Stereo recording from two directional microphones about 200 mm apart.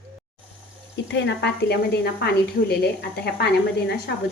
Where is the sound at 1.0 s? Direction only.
65° left (ahead or behind).